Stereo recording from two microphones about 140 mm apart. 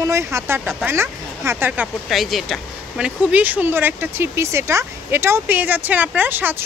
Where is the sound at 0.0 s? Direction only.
20° right (ahead or behind).